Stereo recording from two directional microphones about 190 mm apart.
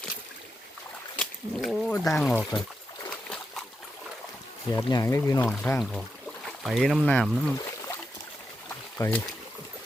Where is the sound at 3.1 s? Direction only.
5° left (ahead or behind).